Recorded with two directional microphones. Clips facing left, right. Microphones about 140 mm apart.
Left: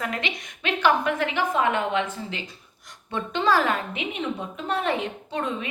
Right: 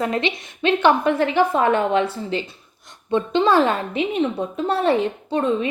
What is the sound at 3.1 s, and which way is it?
A woman's voice, 25° right (ahead or behind).